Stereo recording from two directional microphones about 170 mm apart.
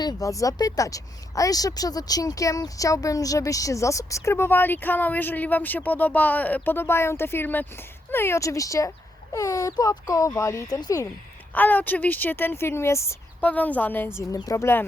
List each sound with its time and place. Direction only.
0.0 s speech: 20° left (ahead or behind)
11.5 s speech: 10° left (ahead or behind)